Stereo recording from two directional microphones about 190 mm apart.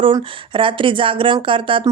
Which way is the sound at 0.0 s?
25° right (ahead or behind).